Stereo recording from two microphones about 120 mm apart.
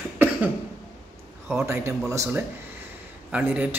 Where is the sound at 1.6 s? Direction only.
20° right (ahead or behind).